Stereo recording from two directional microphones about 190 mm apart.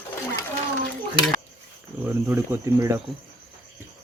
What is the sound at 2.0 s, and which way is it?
Speech, 10° right (ahead or behind).